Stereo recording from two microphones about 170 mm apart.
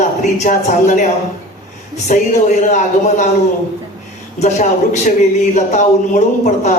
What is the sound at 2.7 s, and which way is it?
Speech, 45° left (ahead or behind).